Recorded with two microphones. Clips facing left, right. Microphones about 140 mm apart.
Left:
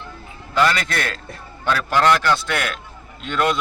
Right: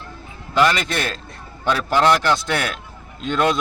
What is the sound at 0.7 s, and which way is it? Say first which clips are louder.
A man's voice: right 1 dB; 20° right (ahead or behind).